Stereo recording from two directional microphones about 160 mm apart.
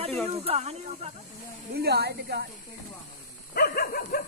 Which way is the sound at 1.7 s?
90° right.